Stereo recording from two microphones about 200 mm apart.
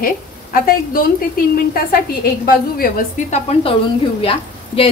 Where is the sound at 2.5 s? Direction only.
45° left (ahead or behind); by 4.9 s 30° left (ahead or behind).